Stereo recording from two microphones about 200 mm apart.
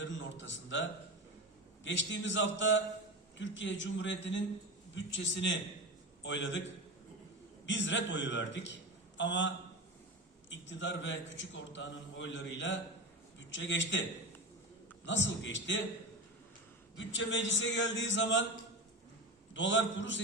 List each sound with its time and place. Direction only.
0.0 s a man's voice: 65° left (ahead or behind)
7.7 s a man's voice: 65° left (ahead or behind)
10.5 s a man's voice: 65° left (ahead or behind)
15.0 s a man's voice: 65° left (ahead or behind)
17.0 s a man's voice: 65° left (ahead or behind)
19.5 s a man's voice: 65° left (ahead or behind)